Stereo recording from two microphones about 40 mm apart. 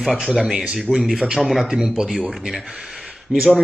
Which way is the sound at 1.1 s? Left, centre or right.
Centre.